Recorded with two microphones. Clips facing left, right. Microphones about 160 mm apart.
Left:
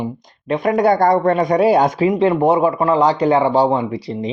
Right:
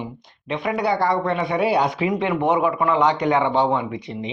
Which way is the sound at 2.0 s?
30° left (ahead or behind).